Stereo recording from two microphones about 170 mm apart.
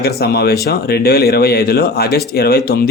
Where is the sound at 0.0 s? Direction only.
65° left (ahead or behind).